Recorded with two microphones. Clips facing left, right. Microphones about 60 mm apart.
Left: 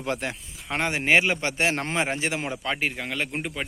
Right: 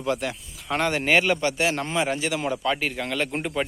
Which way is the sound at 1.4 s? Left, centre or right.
Left.